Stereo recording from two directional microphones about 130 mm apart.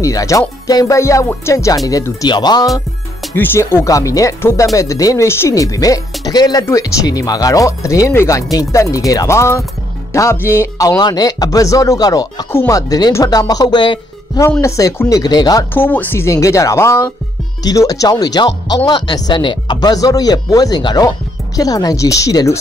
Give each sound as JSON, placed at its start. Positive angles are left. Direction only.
{"t": 0.0, "sound": "speech", "side_deg": 25}
{"t": 3.3, "sound": "speech", "side_deg": 15}
{"t": 14.6, "sound": "speech", "side_deg": 25}
{"t": 15.7, "sound": "speech", "side_deg": 15}